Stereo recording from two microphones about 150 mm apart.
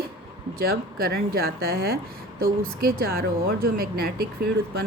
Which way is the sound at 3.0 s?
90° right.